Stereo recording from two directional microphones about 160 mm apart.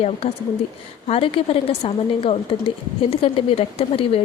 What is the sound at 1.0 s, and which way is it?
A woman's voice, 35° left (ahead or behind).